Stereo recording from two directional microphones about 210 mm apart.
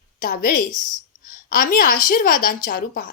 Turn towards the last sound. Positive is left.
turn(degrees=40)  # may be behind; listen again after turning